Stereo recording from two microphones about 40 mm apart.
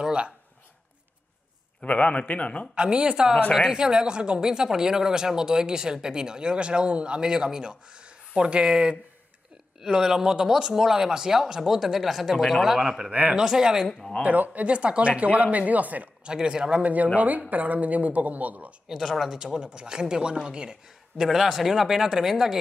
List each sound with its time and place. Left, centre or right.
0.0 s speech: right
1.8 s a man's voice: left
2.7 s speech: right
8.4 s speech: right; by 12.6 s centre
12.6 s speech: centre
14.2 s speech: right
16.3 s speech: right
16.8 s speech: right
18.9 s speech: centre
19.3 s speech: centre
21.2 s speech: centre